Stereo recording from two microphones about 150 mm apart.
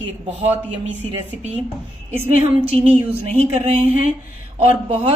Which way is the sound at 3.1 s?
45° right (ahead or behind).